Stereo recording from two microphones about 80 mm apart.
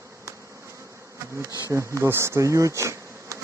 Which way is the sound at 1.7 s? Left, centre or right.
Right.